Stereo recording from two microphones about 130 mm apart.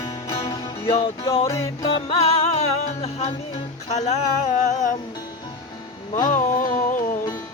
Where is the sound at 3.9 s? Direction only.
60° left (ahead or behind).